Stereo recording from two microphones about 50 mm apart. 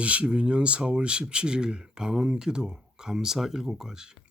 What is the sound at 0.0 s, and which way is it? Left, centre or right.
Speech, right.